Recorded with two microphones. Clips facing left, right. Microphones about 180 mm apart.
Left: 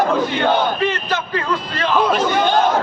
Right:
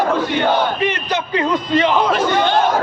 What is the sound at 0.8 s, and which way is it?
A man's voice, 15° right (ahead or behind).